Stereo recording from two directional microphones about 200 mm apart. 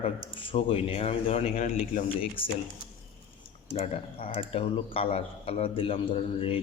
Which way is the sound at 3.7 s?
30° left (ahead or behind).